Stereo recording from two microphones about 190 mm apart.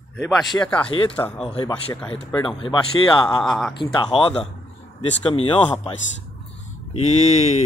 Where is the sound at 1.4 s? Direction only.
30° left (ahead or behind).